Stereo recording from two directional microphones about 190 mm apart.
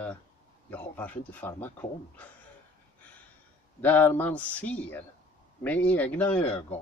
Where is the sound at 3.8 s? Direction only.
10° left (ahead or behind).